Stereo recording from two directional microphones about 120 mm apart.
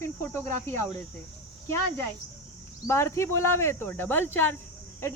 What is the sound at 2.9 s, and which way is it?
Speech, 20° left (ahead or behind).